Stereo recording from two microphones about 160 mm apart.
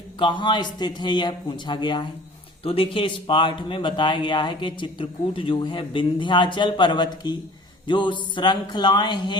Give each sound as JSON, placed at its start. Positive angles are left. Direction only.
{"t": 0.2, "sound": "speech", "side_deg": 30}